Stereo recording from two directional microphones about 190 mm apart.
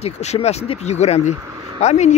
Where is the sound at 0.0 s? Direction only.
35° left (ahead or behind).